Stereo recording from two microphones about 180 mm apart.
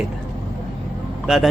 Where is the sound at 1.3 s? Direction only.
5° right (ahead or behind).